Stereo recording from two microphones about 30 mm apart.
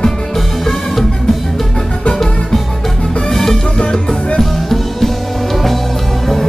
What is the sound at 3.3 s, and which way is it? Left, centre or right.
Music, centre.